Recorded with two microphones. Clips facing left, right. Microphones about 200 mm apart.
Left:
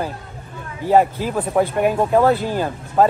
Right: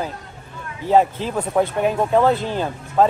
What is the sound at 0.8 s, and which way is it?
Speech, 5° left (ahead or behind).